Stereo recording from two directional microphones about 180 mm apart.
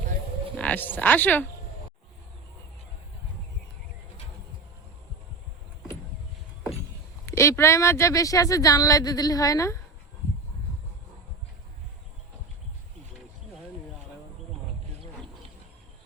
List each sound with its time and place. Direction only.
0.6 s speech: 10° left (ahead or behind)
7.3 s speech: 15° left (ahead or behind)